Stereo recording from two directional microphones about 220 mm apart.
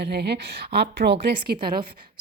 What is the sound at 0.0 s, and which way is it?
A woman's voice, 50° right (ahead or behind).